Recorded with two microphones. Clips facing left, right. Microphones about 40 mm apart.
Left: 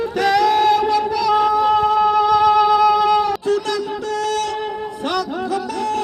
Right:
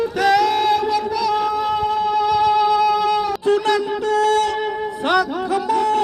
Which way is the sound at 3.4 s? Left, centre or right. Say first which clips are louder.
Right 3 dB; right.